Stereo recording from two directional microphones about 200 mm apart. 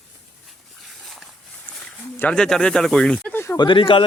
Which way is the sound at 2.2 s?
5° left (ahead or behind).